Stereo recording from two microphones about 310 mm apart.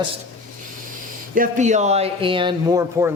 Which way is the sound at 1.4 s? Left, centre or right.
Right.